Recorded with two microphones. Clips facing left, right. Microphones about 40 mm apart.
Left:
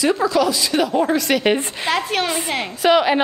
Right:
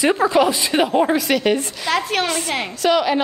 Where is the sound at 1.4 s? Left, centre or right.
Left.